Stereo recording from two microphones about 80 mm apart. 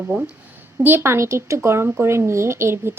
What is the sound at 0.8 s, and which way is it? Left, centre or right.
Speech, right.